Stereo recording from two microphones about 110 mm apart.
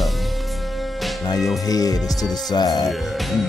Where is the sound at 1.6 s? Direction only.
35° left (ahead or behind).